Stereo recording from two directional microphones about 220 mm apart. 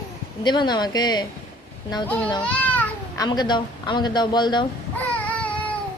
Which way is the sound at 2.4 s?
5° left (ahead or behind).